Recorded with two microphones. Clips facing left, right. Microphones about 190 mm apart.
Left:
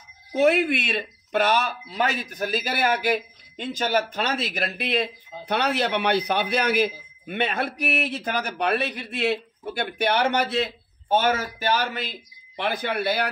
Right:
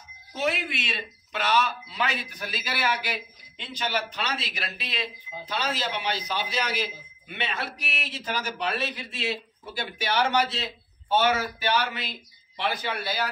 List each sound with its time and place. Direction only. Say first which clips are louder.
0.3 s speech: left 9 dB; 55° left (ahead or behind)